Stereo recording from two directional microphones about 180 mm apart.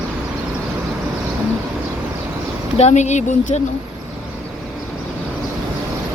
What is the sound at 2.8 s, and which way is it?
Speech, 40° left (ahead or behind).